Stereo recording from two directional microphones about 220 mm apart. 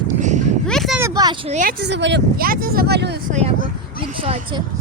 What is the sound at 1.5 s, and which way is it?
Speech, 40° right (ahead or behind).